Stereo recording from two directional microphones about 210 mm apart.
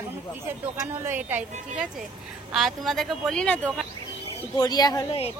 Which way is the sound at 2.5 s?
Centre (ahead or behind).